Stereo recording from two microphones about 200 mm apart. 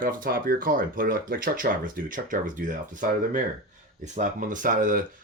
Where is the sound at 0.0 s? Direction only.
45° right (ahead or behind).